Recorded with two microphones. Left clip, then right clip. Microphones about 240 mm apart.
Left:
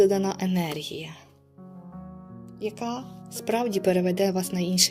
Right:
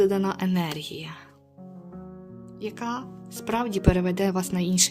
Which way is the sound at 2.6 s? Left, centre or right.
Centre.